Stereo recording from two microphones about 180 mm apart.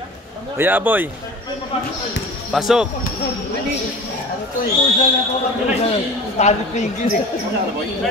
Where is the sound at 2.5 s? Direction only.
Centre (ahead or behind).